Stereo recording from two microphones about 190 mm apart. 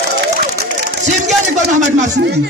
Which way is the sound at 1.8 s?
40° right (ahead or behind).